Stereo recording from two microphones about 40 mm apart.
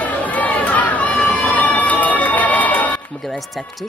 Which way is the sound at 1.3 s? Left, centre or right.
Left.